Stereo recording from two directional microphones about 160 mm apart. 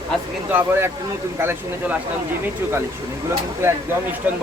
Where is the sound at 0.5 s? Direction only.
15° right (ahead or behind).